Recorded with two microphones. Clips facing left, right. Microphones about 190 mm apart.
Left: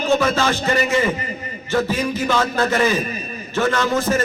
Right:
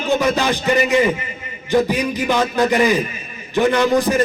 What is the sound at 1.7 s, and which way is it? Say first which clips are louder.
A man's voice: right 3 dB; 15° right (ahead or behind).